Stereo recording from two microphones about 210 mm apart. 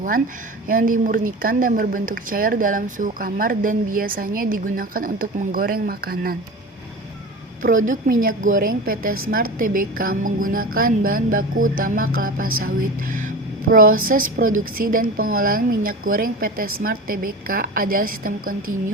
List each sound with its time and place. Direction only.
0.7 s speech: 40° right (ahead or behind)
7.9 s a woman's voice: 40° right (ahead or behind)
12.5 s speech: 85° right
13.1 s a sound: 40° right (ahead or behind)
13.8 s speech: 75° right (ahead or behind)
14.1 s a woman's voice: 40° right (ahead or behind)